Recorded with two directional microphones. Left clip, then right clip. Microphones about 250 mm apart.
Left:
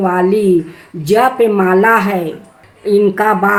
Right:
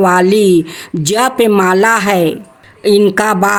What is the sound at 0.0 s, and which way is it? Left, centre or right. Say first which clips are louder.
Speech: right 3 dB; right.